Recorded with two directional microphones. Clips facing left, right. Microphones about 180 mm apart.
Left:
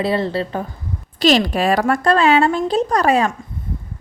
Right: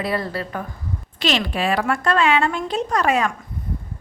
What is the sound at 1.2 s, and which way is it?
Speech, 40° left (ahead or behind).